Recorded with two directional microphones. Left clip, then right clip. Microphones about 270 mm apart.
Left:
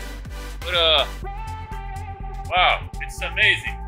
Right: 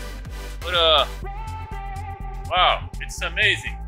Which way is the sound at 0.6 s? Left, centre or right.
Centre.